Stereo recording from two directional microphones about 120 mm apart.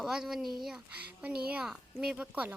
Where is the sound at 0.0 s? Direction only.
5° right (ahead or behind).